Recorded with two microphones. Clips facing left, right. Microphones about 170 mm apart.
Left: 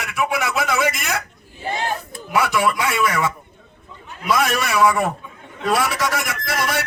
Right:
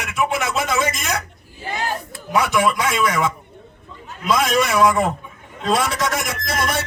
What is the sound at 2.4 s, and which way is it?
A man's voice, 20° right (ahead or behind).